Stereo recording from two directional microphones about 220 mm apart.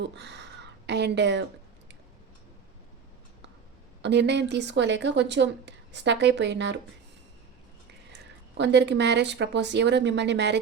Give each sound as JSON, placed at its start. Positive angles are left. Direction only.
{"t": 0.0, "sound": "speech", "side_deg": -50}
{"t": 4.0, "sound": "speech", "side_deg": -50}
{"t": 8.5, "sound": "speech", "side_deg": -50}